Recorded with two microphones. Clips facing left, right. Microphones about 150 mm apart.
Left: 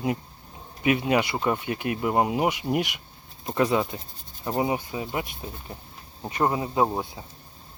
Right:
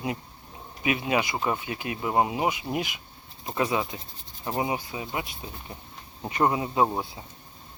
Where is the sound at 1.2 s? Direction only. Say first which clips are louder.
Left 2 dB; 65° left (ahead or behind).